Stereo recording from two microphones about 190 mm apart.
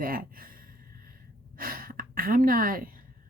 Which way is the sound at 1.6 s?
50° right (ahead or behind).